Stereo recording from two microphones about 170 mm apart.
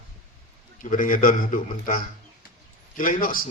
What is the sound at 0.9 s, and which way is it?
A man's voice, 55° left (ahead or behind).